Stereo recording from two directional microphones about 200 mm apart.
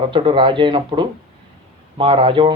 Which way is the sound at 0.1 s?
25° right (ahead or behind).